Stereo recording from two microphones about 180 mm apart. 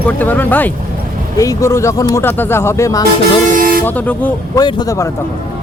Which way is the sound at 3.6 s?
50° right (ahead or behind).